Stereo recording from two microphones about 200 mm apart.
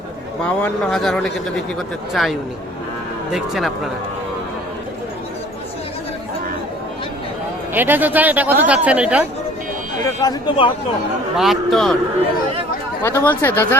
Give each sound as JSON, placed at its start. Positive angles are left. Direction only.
{"t": 0.4, "sound": "speech", "side_deg": 5}
{"t": 3.3, "sound": "speech", "side_deg": 0}
{"t": 7.7, "sound": "speech", "side_deg": -10}
{"t": 10.2, "sound": "speech", "side_deg": 20}
{"t": 11.3, "sound": "speech", "side_deg": 0}
{"t": 13.0, "sound": "speech", "side_deg": 10}